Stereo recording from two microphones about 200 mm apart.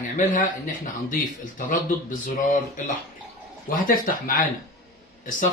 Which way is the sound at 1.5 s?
40° left (ahead or behind).